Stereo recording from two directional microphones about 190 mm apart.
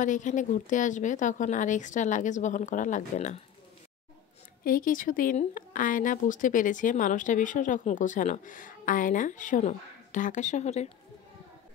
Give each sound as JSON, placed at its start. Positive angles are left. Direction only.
{"t": 0.0, "sound": "speech", "side_deg": 40}
{"t": 4.6, "sound": "speech", "side_deg": 45}